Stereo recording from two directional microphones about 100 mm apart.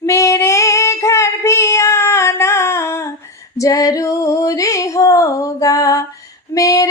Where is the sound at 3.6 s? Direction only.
35° left (ahead or behind).